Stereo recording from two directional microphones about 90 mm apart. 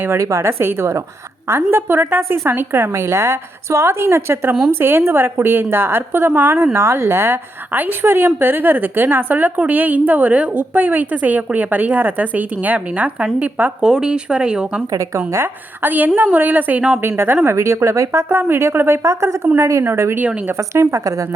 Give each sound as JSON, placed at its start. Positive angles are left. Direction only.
{"t": 0.0, "sound": "a woman's voice", "side_deg": -30}
{"t": 14.8, "sound": "speech", "side_deg": -35}
{"t": 15.3, "sound": "a woman's voice", "side_deg": -25}
{"t": 17.0, "sound": "a woman's voice", "side_deg": -25}